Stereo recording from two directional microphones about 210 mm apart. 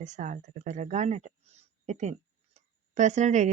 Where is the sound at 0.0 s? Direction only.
35° right (ahead or behind).